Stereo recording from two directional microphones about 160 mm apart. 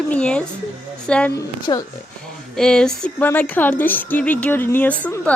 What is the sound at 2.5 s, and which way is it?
A woman's voice, 5° left (ahead or behind).